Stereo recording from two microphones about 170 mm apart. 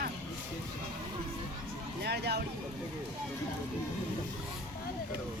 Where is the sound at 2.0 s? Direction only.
75° right (ahead or behind).